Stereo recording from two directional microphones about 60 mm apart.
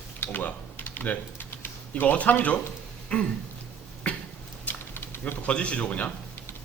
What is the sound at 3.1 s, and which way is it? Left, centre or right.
Speech, centre.